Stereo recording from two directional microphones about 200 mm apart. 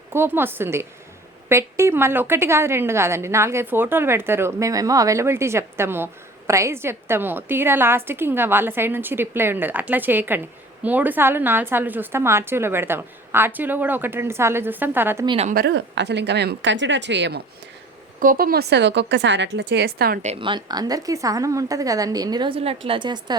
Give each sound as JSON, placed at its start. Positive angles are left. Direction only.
{"t": 0.1, "sound": "a woman's voice", "side_deg": -10}
{"t": 15.3, "sound": "a woman's voice", "side_deg": -30}
{"t": 15.5, "sound": "speech", "side_deg": -60}
{"t": 18.2, "sound": "speech", "side_deg": -45}
{"t": 20.2, "sound": "a woman's voice", "side_deg": -25}